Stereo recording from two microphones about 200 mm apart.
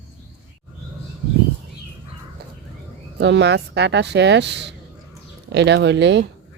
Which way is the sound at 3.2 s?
60° right (ahead or behind).